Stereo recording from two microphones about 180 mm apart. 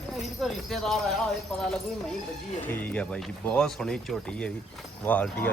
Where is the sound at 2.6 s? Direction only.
10° left (ahead or behind).